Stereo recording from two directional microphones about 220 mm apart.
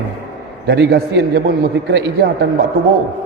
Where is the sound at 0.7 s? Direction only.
45° right (ahead or behind).